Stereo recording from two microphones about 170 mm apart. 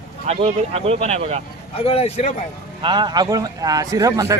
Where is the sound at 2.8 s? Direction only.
25° right (ahead or behind).